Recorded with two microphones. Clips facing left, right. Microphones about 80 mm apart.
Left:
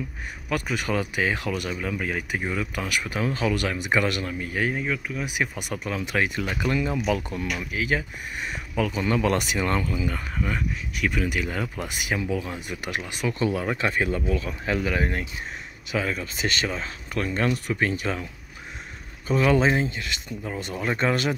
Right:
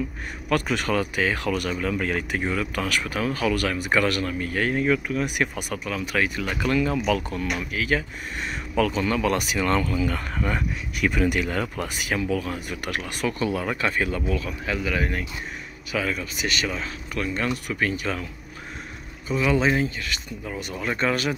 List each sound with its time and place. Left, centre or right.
0.5 s speech: centre
4.8 s speech: centre
5.9 s speech: left
10.4 s speech: centre
11.6 s speech: centre
12.0 s speech: left
19.2 s speech: left